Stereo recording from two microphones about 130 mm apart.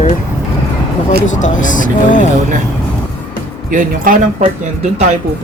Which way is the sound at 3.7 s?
90° right.